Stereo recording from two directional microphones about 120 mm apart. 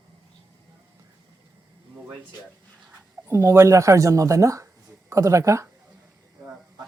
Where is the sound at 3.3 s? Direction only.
25° right (ahead or behind).